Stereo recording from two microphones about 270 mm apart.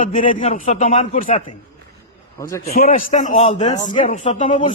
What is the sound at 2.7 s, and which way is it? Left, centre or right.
Speech, left.